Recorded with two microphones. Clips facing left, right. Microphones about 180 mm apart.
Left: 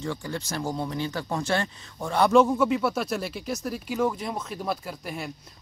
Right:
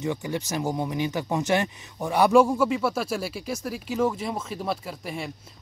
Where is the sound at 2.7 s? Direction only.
Centre (ahead or behind).